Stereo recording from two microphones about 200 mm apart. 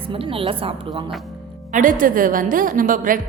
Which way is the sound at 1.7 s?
40° right (ahead or behind).